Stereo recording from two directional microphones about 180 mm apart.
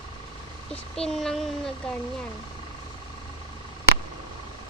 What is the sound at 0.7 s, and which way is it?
Speech, 5° left (ahead or behind).